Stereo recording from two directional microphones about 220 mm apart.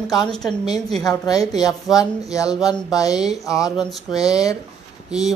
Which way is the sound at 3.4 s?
15° left (ahead or behind).